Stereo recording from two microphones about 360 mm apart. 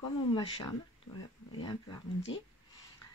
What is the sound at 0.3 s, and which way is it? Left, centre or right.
Speech, centre.